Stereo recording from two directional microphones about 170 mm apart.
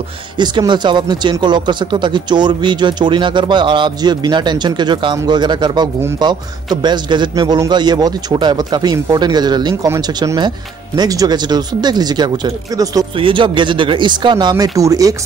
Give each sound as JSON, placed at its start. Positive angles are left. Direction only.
{"t": 0.4, "sound": "speech", "side_deg": -25}